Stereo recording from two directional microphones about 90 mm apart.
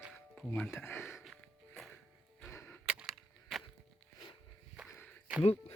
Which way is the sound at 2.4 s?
20° left (ahead or behind).